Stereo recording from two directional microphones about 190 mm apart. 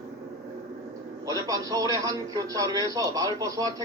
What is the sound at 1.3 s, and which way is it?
Speech, 20° right (ahead or behind).